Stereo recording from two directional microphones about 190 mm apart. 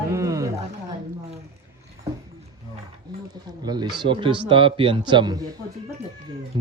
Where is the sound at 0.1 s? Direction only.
15° right (ahead or behind).